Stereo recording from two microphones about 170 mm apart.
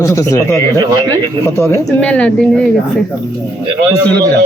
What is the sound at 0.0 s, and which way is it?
Speech, 15° left (ahead or behind).